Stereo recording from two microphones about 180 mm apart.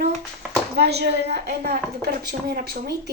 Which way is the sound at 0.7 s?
65° right (ahead or behind).